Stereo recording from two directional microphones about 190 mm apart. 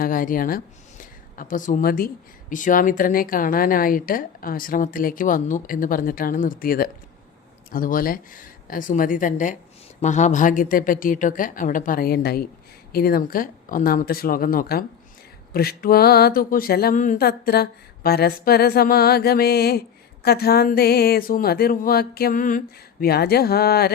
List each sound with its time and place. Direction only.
0.0 s a woman's voice: 45° left (ahead or behind)